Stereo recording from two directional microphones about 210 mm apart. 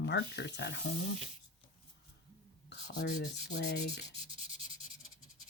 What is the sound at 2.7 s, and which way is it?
Rub, 55° left (ahead or behind).